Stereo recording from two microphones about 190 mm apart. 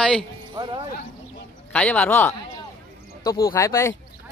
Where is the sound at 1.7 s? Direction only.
5° left (ahead or behind).